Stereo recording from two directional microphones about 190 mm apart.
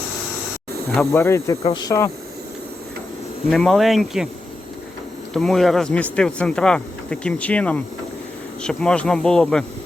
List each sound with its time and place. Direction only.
1.1 s speech: 15° left (ahead or behind)
3.5 s speech: 5° left (ahead or behind)
5.3 s speech: centre (ahead or behind)